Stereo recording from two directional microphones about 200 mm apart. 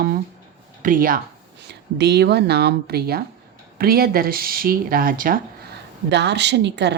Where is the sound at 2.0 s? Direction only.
55° right (ahead or behind).